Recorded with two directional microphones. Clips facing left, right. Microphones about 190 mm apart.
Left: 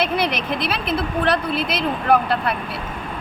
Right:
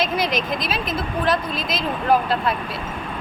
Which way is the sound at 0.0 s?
65° left (ahead or behind).